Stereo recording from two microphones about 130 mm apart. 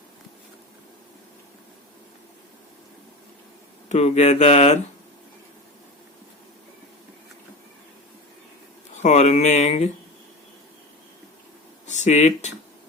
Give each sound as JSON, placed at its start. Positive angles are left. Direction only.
{"t": 3.8, "sound": "speech", "side_deg": 60}
{"t": 9.0, "sound": "speech", "side_deg": 65}
{"t": 11.9, "sound": "speech", "side_deg": 65}